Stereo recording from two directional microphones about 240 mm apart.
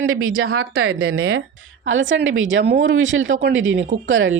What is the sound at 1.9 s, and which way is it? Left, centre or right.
Speech, right.